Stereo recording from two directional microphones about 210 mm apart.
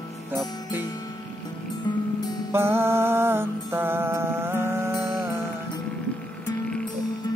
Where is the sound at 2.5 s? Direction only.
10° right (ahead or behind).